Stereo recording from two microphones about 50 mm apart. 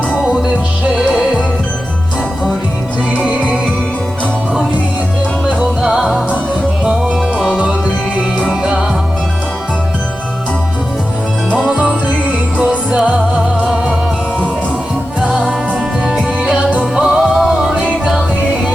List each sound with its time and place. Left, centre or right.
5.8 s music: centre
7.3 s music: centre
8.4 s music: centre
11.5 s music: centre
15.3 s music: centre
16.9 s music: centre